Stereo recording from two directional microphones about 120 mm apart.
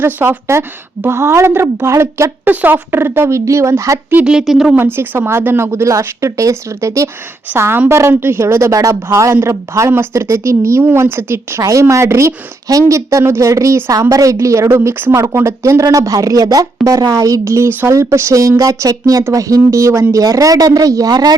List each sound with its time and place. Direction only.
0.0 s a woman's voice: 20° right (ahead or behind)
4.2 s speech: 5° right (ahead or behind)
4.8 s a woman's voice: 20° right (ahead or behind); by 21.3 s 35° right (ahead or behind)